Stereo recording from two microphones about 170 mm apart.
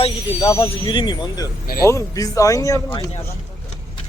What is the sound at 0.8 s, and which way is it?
Speech, 30° left (ahead or behind).